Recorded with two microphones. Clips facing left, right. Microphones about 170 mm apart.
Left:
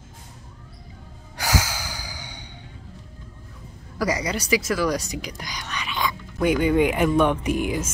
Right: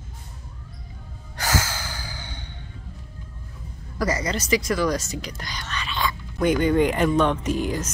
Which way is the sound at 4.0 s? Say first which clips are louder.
Even; 10° left (ahead or behind).